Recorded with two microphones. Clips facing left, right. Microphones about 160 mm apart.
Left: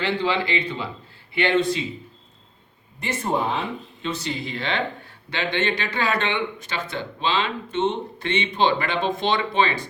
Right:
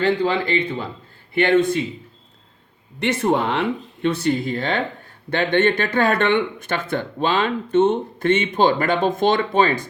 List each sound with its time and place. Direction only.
0.0 s speech: 45° right (ahead or behind)
3.0 s speech: 75° right (ahead or behind); by 9.9 s 45° right (ahead or behind)